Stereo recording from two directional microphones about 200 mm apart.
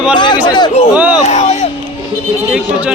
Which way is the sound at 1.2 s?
35° left (ahead or behind).